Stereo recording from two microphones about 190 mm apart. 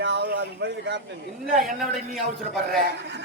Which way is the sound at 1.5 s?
Centre (ahead or behind).